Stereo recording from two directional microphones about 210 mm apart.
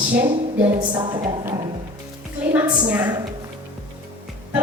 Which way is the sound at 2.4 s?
10° right (ahead or behind).